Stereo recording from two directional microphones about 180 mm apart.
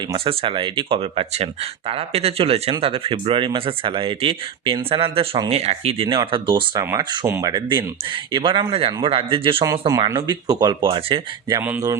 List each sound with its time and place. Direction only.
0.1 s speech: 30° right (ahead or behind)
9.9 s speech: 15° right (ahead or behind)
11.6 s speech: 15° right (ahead or behind)